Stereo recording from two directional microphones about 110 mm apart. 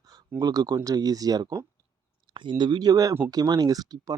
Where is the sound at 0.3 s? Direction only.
35° right (ahead or behind).